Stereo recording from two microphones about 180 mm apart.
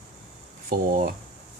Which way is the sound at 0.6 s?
50° right (ahead or behind).